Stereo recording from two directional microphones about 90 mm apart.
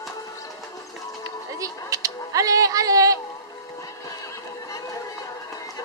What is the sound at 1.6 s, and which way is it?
Speech, 40° right (ahead or behind).